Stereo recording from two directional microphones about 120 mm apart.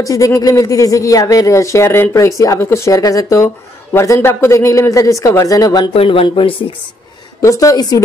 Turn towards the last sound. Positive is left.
turn(degrees=30)  # may be behind; listen again after turning